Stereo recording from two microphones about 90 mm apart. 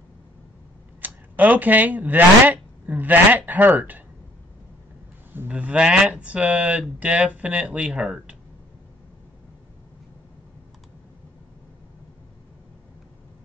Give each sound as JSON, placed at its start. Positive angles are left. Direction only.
{"t": 1.0, "sound": "speech", "side_deg": -20}
{"t": 5.3, "sound": "speech", "side_deg": -20}